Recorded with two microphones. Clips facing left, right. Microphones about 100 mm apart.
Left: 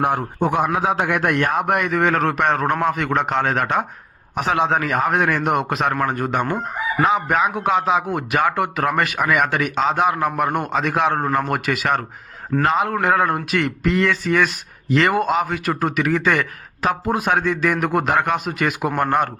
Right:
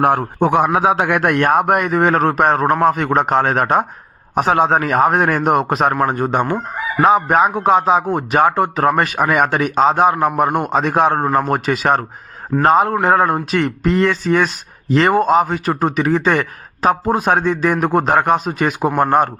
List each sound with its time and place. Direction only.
0.0 s a man's voice: 50° right (ahead or behind)
0.3 s a man's voice: 70° right (ahead or behind); by 19.3 s 30° right (ahead or behind)